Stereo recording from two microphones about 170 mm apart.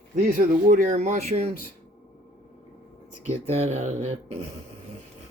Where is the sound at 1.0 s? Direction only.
40° right (ahead or behind).